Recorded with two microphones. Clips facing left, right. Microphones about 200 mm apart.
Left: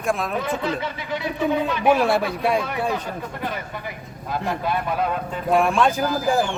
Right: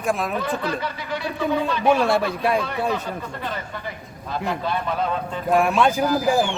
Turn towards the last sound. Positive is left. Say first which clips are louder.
# right 2 dB
turn(degrees=0)  # may be behind; listen again after turning